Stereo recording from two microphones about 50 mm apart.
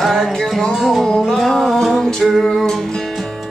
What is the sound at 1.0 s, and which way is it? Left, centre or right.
Music, centre.